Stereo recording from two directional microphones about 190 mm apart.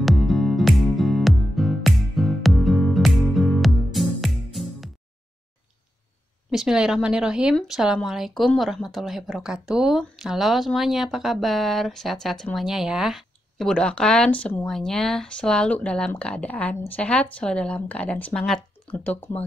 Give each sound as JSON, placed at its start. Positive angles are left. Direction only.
{"t": 0.0, "sound": "music", "side_deg": 0}
{"t": 6.5, "sound": "speech", "side_deg": -5}